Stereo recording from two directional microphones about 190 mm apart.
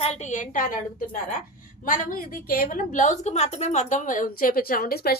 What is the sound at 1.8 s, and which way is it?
A woman's voice, 45° left (ahead or behind).